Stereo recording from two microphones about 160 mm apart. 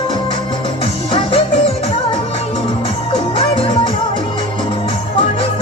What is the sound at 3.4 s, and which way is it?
Music, 35° left (ahead or behind).